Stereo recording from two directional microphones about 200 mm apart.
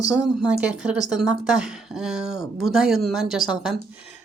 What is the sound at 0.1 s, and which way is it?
Speech, 5° right (ahead or behind).